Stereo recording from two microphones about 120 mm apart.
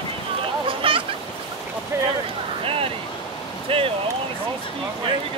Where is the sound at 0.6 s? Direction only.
45° right (ahead or behind).